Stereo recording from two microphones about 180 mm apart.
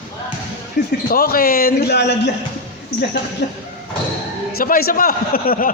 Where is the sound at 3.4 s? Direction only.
70° left (ahead or behind).